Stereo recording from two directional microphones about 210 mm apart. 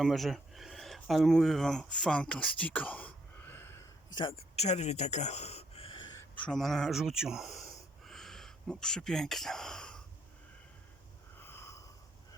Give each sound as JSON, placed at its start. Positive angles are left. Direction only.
{"t": 0.0, "sound": "speech", "side_deg": 0}
{"t": 4.3, "sound": "speech", "side_deg": 30}
{"t": 6.1, "sound": "speech", "side_deg": 5}
{"t": 11.3, "sound": "a sound", "side_deg": 10}